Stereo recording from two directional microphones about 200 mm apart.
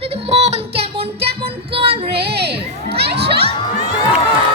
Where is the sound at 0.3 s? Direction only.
35° right (ahead or behind).